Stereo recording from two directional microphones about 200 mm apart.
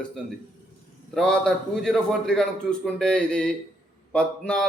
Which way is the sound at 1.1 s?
5° left (ahead or behind).